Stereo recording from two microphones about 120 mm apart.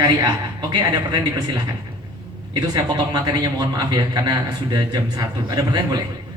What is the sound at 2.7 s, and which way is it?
A woman's voice, 35° right (ahead or behind).